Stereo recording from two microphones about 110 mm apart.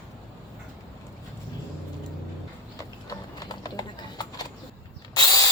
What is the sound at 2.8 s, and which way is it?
Clip-clop, 35° left (ahead or behind).